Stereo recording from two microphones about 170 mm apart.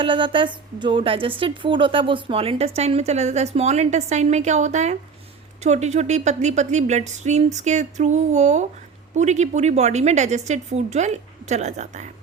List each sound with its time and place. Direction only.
0.0 s a woman's voice: 30° right (ahead or behind)